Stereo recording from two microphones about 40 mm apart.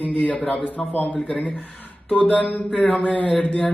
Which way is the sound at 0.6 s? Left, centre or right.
Left.